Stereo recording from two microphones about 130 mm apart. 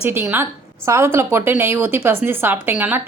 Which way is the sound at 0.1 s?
15° right (ahead or behind).